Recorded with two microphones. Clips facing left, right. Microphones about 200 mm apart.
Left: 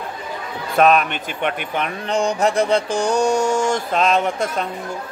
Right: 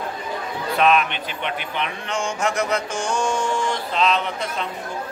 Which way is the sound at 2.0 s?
35° left (ahead or behind).